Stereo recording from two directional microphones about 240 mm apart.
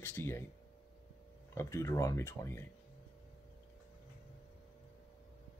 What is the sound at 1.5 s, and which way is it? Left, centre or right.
Speech, centre.